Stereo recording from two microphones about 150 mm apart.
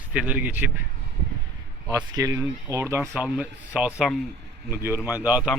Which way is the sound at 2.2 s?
20° right (ahead or behind).